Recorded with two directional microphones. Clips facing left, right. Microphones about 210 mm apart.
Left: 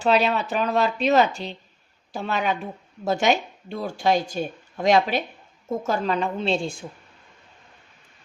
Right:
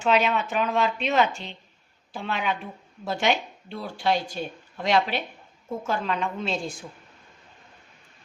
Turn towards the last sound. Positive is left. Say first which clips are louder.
# left 5 dB
turn(degrees=30)  # may be behind; listen again after turning